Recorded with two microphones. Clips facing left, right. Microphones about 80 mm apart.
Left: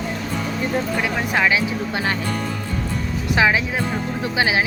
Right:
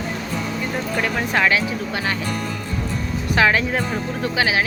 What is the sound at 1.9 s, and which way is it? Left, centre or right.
Speech, left.